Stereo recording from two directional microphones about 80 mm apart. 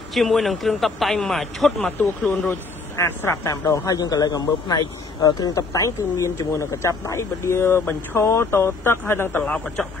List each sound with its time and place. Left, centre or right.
0.1 s a man's voice: centre
1.9 s speech: centre
3.0 s a man's voice: left
9.4 s speech: centre